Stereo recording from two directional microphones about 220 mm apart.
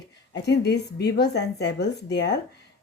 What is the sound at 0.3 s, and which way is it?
A woman's voice, 50° left (ahead or behind).